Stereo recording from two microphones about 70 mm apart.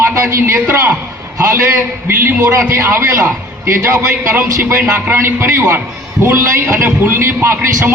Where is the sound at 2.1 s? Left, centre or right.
Right.